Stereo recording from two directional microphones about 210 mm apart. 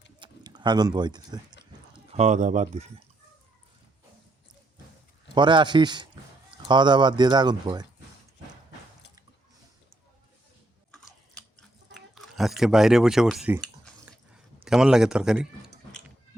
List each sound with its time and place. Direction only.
0.2 s speech: 20° right (ahead or behind)
2.1 s speech: 35° right (ahead or behind)
5.3 s speech: 20° right (ahead or behind)
11.9 s speech: centre (ahead or behind)
14.0 s a sound: 5° right (ahead or behind)